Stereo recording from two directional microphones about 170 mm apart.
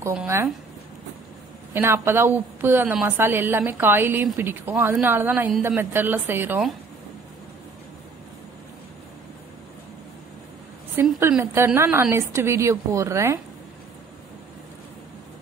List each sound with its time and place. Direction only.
0.0 s speech: 10° right (ahead or behind)
1.7 s a woman's voice: 15° right (ahead or behind)
11.0 s a sound: 15° right (ahead or behind)
11.5 s a woman's voice: 15° right (ahead or behind)